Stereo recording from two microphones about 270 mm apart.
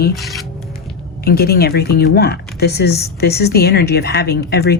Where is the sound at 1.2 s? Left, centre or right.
Left.